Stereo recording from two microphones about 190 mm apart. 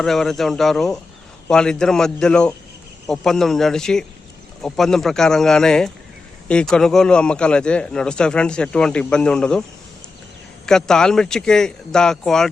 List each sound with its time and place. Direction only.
0.0 s a man's voice: centre (ahead or behind)
10.7 s a man's voice: 5° left (ahead or behind)